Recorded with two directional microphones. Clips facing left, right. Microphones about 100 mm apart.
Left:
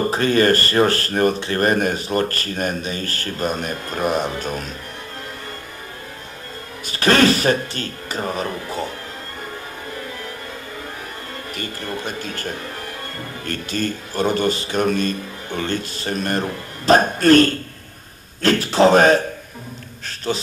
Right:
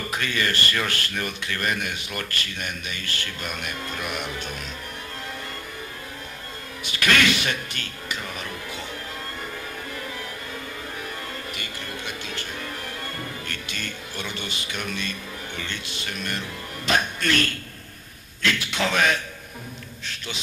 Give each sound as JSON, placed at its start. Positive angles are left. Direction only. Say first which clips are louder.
{"t": 0.0, "sound": "speech", "louder": "left 11 dB", "side_deg": 35}
{"t": 6.8, "sound": "music", "louder": "left 7 dB", "side_deg": 35}
{"t": 11.5, "sound": "speech", "louder": "left 7 dB", "side_deg": 40}
{"t": 18.4, "sound": "a sound", "louder": "left 11 dB", "side_deg": 40}